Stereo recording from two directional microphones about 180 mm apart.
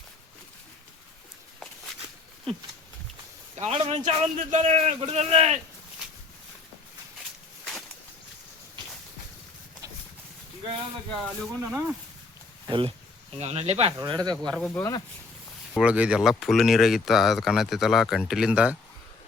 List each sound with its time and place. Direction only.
3.6 s a man's voice: 35° right (ahead or behind)
7.6 s a sound: centre (ahead or behind)
11.6 s speech: 10° right (ahead or behind)
12.6 s a man's voice: 30° right (ahead or behind)
13.9 s speech: 20° right (ahead or behind)
14.5 s speech: 5° left (ahead or behind)
15.7 s speech: 5° right (ahead or behind)